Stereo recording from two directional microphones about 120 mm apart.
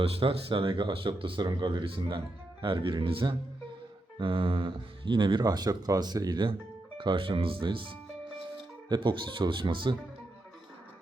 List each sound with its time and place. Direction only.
0.0 s speech: 50° right (ahead or behind)